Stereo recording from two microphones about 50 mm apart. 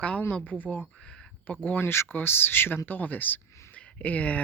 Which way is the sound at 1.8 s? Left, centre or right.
Left.